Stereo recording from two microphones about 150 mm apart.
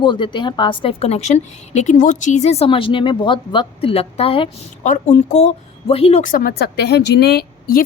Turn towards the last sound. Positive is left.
turn(degrees=90)